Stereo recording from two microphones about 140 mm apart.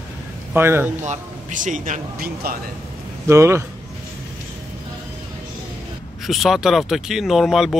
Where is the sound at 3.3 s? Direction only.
20° right (ahead or behind).